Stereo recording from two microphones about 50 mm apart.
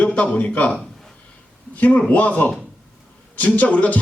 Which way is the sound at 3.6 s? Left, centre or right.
Left.